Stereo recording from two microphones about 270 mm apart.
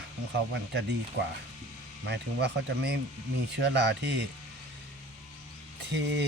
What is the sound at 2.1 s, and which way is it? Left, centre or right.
Speech, right.